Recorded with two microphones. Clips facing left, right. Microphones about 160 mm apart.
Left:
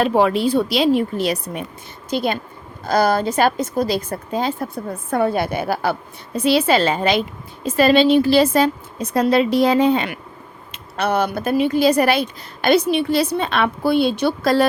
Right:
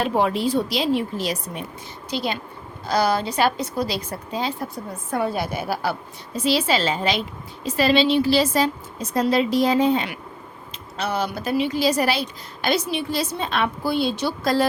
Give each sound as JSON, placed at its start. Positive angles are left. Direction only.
{"t": 0.0, "sound": "a woman's voice", "side_deg": 75}